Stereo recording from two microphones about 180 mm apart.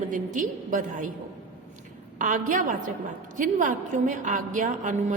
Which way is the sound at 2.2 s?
45° right (ahead or behind).